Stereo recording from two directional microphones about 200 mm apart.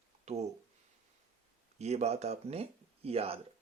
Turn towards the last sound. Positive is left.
turn(degrees=-30)  # may be behind; listen again after turning